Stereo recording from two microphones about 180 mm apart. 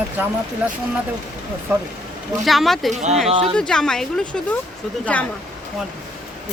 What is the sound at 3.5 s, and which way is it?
A woman's voice, 5° left (ahead or behind).